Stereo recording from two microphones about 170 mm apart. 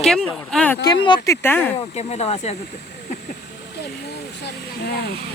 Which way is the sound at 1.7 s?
40° left (ahead or behind).